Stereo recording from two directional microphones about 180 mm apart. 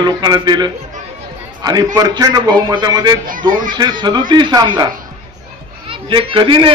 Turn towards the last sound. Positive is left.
turn(degrees=-25)  # may be behind; listen again after turning